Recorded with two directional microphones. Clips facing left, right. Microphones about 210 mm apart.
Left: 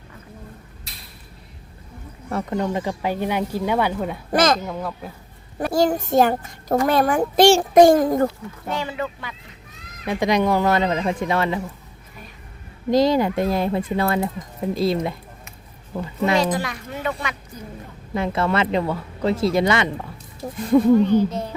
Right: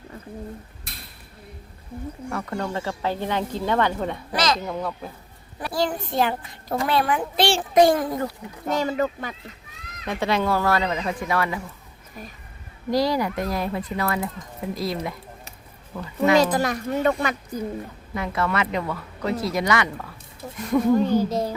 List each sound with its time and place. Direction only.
0.9 s a sound: 55° right (ahead or behind)
2.6 s speech: 15° left (ahead or behind)
4.3 s a child's voice: 50° left (ahead or behind)
4.6 s speech: centre (ahead or behind)
5.5 s a child's voice: 45° left (ahead or behind)
8.7 s a woman's voice: 40° right (ahead or behind)
10.1 s speech: 15° left (ahead or behind)
12.9 s speech: 20° left (ahead or behind)
16.4 s a woman's voice: 40° right (ahead or behind)
18.1 s speech: 30° left (ahead or behind)
20.4 s speech: 35° left (ahead or behind)
21.1 s a woman's voice: 40° right (ahead or behind)